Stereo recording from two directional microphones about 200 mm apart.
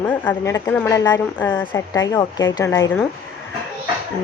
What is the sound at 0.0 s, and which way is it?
Speech, 10° left (ahead or behind).